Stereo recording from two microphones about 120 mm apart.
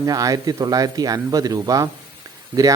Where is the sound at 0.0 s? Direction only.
30° right (ahead or behind).